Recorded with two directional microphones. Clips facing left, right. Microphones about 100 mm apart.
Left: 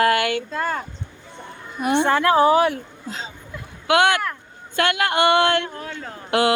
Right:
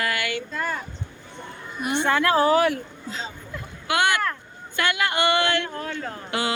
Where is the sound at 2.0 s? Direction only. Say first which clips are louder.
Left 3 dB; 30° left (ahead or behind).